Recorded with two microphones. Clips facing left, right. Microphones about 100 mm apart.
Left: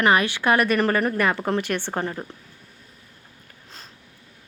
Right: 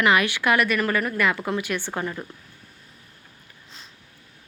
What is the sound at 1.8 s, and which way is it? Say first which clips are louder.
Speech: left 2 dB; 30° left (ahead or behind).